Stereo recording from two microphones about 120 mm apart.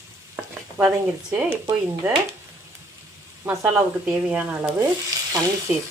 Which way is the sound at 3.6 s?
10° right (ahead or behind).